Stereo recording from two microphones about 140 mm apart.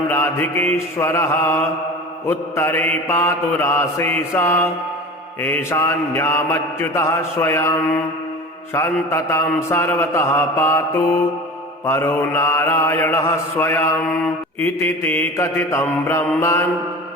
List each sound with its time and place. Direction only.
0.1 s mantra: 15° left (ahead or behind)